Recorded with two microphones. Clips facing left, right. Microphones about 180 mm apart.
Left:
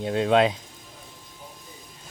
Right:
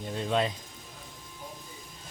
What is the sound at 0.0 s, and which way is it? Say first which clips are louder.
Speech: left 9 dB; 75° left (ahead or behind).